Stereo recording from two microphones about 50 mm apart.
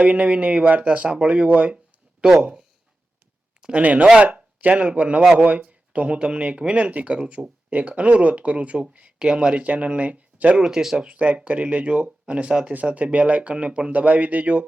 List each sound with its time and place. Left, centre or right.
0.0 s speech: right
2.2 s speech: centre
3.6 s speech: right
10.6 s speech: centre
11.1 s speech: right